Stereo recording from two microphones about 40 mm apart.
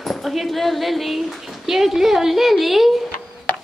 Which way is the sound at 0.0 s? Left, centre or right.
Centre.